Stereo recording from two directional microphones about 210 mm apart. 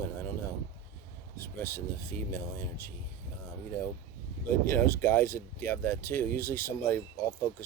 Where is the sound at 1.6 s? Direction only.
10° left (ahead or behind).